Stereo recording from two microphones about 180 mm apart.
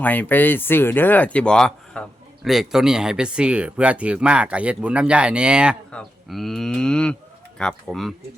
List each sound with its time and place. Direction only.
0.0 s speech: 10° left (ahead or behind)